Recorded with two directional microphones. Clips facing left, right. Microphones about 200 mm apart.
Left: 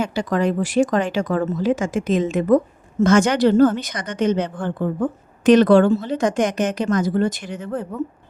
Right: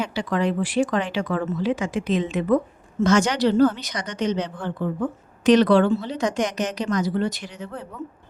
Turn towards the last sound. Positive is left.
turn(degrees=50)  # may be behind; listen again after turning